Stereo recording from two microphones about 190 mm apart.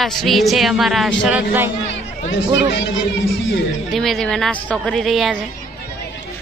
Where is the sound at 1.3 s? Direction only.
10° right (ahead or behind).